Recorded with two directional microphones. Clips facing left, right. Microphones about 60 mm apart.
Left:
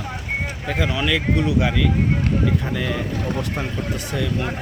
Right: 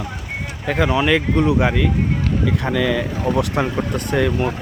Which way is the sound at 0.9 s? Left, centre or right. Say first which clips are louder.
Right 4 dB; right.